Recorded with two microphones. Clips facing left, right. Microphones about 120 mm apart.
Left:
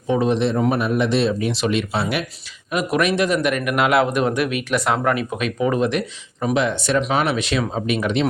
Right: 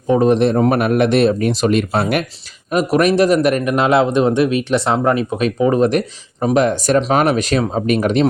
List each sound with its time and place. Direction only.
0.1 s speech: 45° right (ahead or behind)
0.8 s a man's voice: 65° right (ahead or behind); by 7.9 s 35° right (ahead or behind)
7.9 s speech: 45° right (ahead or behind)